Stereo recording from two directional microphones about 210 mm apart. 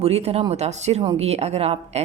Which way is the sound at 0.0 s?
30° right (ahead or behind).